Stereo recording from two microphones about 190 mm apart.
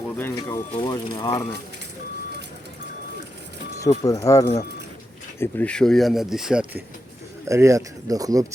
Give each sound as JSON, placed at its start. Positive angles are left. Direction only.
{"t": 0.2, "sound": "speech", "side_deg": 15}
{"t": 3.8, "sound": "speech", "side_deg": 15}
{"t": 7.4, "sound": "speech", "side_deg": -15}